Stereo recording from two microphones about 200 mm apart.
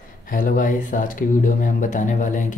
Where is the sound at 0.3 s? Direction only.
45° left (ahead or behind).